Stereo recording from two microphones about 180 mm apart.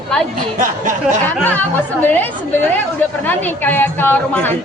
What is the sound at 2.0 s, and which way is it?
Speech, 10° left (ahead or behind).